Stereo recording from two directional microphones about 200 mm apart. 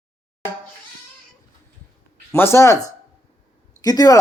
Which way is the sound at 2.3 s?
10° left (ahead or behind).